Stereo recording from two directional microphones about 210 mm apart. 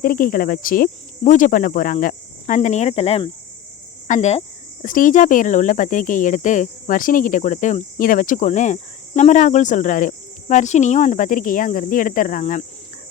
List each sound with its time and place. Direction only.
0.0 s speech: 40° left (ahead or behind)